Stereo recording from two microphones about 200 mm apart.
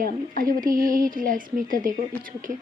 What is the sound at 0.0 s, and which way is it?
A woman's voice, 45° right (ahead or behind).